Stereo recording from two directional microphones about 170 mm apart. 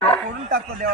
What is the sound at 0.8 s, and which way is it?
Speech, 70° right (ahead or behind).